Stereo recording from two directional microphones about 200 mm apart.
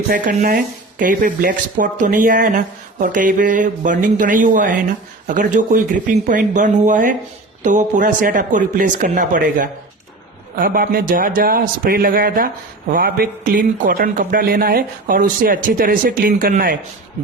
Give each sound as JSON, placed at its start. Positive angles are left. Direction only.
{"t": 0.1, "sound": "a man's voice", "side_deg": -45}